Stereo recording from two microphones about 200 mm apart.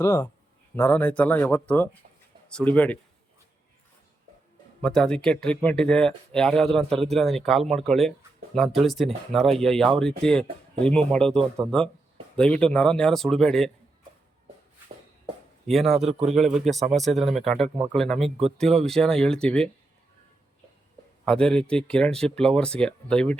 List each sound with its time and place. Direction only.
0.0 s speech: 15° left (ahead or behind)
4.8 s a man's voice: 5° left (ahead or behind)
15.6 s a man's voice: centre (ahead or behind)
15.9 s a man's voice: 30° right (ahead or behind)
16.3 s a man's voice: centre (ahead or behind)
21.2 s a man's voice: 5° left (ahead or behind)